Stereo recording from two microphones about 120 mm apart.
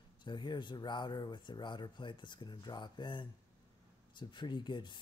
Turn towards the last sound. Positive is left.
turn(degrees=40)  # may be behind; listen again after turning